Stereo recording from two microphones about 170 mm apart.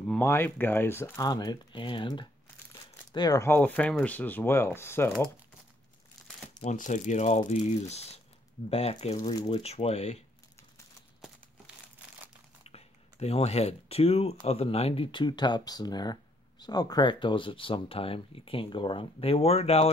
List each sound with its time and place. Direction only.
0.2 s speech: 15° left (ahead or behind)
6.6 s speech: 45° left (ahead or behind)
12.6 s speech: 35° left (ahead or behind)